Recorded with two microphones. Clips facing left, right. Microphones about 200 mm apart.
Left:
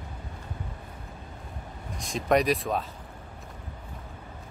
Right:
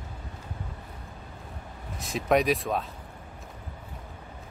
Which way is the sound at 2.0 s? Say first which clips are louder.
Even; 5° right (ahead or behind).